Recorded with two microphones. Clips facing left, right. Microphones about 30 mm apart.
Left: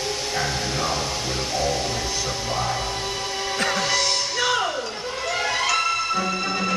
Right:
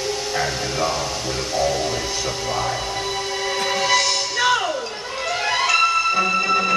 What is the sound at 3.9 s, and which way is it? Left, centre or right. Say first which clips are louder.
Music: right 4 dB; right.